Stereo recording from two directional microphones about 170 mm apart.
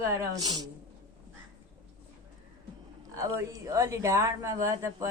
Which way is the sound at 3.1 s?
20° right (ahead or behind).